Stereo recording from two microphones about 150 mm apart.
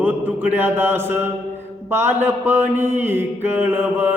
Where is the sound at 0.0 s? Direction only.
10° right (ahead or behind).